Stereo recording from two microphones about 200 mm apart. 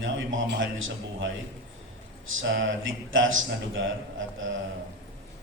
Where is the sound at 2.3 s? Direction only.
70° right (ahead or behind).